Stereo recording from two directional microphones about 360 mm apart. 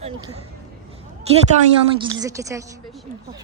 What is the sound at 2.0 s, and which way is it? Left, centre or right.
Speech, centre.